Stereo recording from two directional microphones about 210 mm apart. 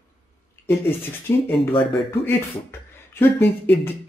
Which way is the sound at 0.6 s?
10° left (ahead or behind).